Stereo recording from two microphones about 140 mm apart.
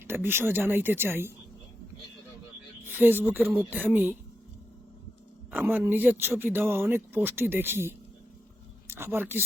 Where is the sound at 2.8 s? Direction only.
15° right (ahead or behind).